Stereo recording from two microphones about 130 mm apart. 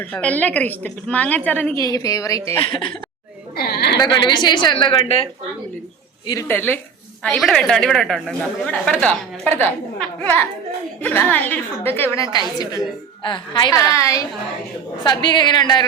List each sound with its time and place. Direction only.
0.0 s a woman's voice: 10° left (ahead or behind)
1.7 s a woman's voice: 25° left (ahead or behind)
2.6 s speech: 45° left (ahead or behind)
3.9 s a woman's voice: 35° left (ahead or behind)
6.5 s a woman's voice: 15° left (ahead or behind)
7.2 s a woman's voice: 5° left (ahead or behind); by 12.4 s 25° left (ahead or behind)
13.2 s a woman's voice: 35° left (ahead or behind)
13.7 s a woman's voice: 25° left (ahead or behind)
15.0 s a woman's voice: 35° left (ahead or behind)